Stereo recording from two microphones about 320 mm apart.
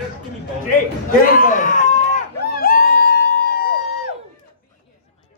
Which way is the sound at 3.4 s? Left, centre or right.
Left.